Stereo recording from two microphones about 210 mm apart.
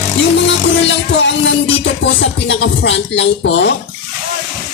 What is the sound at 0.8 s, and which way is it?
Music, 60° left (ahead or behind).